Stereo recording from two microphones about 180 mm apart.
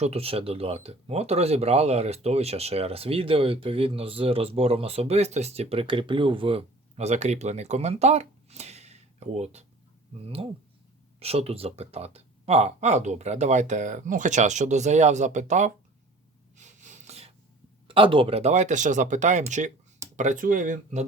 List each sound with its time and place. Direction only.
0.0 s speech: 35° right (ahead or behind)
11.2 s speech: 35° right (ahead or behind)
16.6 s a sound: 40° right (ahead or behind)
17.8 s speech: 30° right (ahead or behind); by 21.0 s 45° right (ahead or behind)